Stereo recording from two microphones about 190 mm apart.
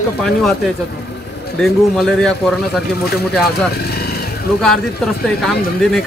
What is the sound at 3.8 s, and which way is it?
Vehicle, 55° left (ahead or behind).